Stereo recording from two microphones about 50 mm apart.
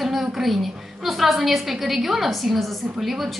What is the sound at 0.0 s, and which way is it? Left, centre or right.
A woman's voice, centre.